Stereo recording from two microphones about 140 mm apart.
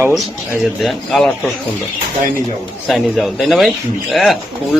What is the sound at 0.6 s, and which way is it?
Speech, centre (ahead or behind).